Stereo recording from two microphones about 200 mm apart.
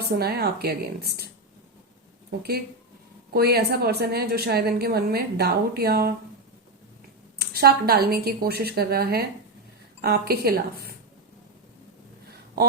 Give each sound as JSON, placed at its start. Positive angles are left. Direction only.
{"t": 0.0, "sound": "a woman's voice", "side_deg": -50}
{"t": 3.3, "sound": "a woman's voice", "side_deg": -50}
{"t": 7.3, "sound": "a woman's voice", "side_deg": -50}